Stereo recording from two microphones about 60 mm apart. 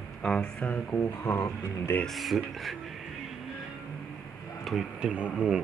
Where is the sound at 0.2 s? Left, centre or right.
Centre.